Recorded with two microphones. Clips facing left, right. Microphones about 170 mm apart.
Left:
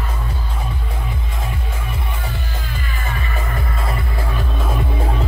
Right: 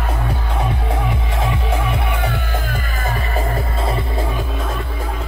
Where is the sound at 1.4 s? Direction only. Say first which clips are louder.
Right 8 dB; 85° right.